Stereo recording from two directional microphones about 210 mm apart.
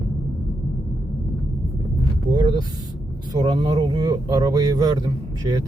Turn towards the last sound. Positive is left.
turn(degrees=-20)  # may be behind; listen again after turning